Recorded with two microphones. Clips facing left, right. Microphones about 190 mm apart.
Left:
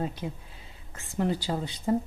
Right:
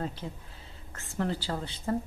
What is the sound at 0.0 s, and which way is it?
A woman's voice, 15° left (ahead or behind).